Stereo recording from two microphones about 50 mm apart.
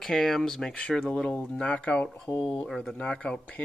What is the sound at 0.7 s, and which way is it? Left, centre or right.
Speech, left.